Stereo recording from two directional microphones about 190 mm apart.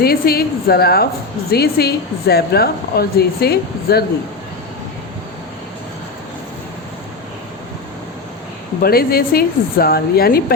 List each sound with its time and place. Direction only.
0.0 s a woman's voice: 55° left (ahead or behind)
8.8 s a woman's voice: 55° left (ahead or behind)